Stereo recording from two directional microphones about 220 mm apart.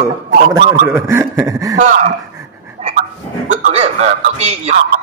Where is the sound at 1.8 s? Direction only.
35° right (ahead or behind).